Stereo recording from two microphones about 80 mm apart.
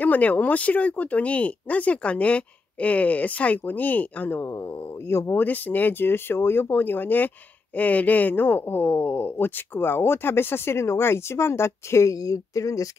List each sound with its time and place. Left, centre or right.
0.0 s speech: left